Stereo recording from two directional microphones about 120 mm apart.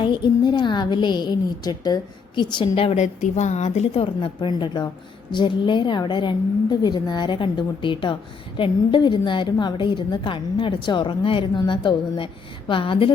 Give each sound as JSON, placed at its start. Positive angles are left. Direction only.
{"t": 0.0, "sound": "a woman's voice", "side_deg": 40}
{"t": 3.0, "sound": "a woman's voice", "side_deg": 80}